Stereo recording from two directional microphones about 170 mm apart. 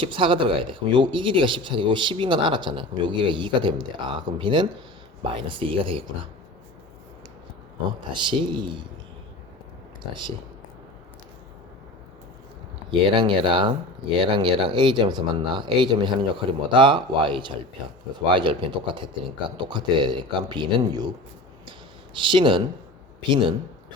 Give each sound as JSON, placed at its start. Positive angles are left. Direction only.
{"t": 0.0, "sound": "speech", "side_deg": -30}
{"t": 8.1, "sound": "speech", "side_deg": -30}
{"t": 13.1, "sound": "speech", "side_deg": -30}
{"t": 21.7, "sound": "a sound", "side_deg": -30}
{"t": 23.3, "sound": "speech", "side_deg": -30}